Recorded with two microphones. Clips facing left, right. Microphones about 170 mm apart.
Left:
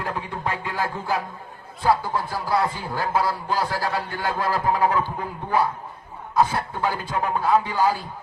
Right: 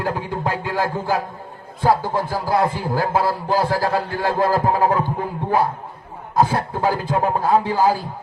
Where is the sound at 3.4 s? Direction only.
35° right (ahead or behind).